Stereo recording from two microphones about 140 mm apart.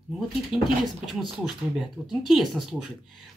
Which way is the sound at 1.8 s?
Centre (ahead or behind).